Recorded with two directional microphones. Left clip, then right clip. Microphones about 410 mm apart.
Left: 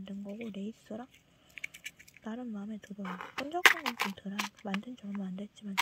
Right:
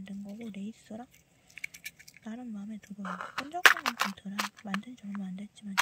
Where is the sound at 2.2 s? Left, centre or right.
Centre.